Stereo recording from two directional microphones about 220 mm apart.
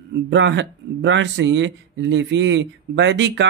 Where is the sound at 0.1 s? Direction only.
55° right (ahead or behind).